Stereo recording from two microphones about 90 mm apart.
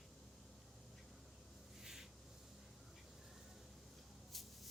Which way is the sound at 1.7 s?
5° right (ahead or behind).